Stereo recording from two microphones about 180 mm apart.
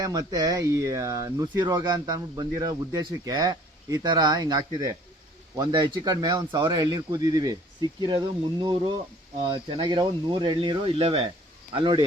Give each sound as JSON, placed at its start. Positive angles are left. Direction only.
{"t": 0.0, "sound": "speech", "side_deg": -20}